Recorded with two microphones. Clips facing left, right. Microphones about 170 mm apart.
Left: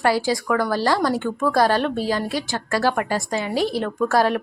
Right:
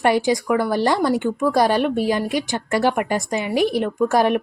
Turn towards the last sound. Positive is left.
turn(degrees=-20)  # may be behind; listen again after turning